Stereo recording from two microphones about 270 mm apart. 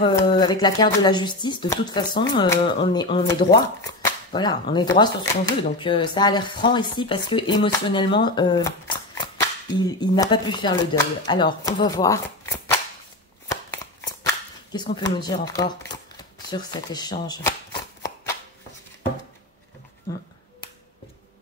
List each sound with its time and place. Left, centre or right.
0.0 s speech: centre
13.5 s shuffling cards: centre
16.4 s speech: centre